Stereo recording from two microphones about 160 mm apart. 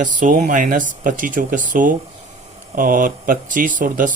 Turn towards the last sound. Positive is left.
turn(degrees=-55)  # may be behind; listen again after turning